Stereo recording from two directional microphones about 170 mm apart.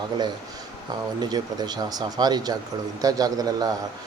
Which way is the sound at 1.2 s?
25° right (ahead or behind).